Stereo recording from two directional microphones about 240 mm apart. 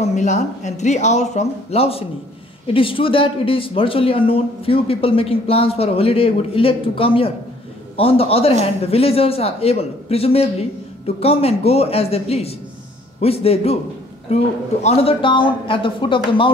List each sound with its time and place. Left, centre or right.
0.0 s speech: left